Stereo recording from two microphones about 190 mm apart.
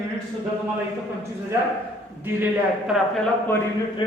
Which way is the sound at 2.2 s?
10° right (ahead or behind).